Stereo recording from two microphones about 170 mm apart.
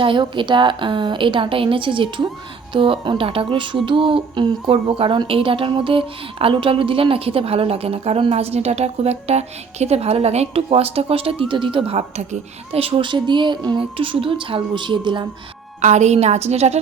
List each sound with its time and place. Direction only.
0.0 s a woman's voice: 30° right (ahead or behind)
15.8 s speech: 45° right (ahead or behind)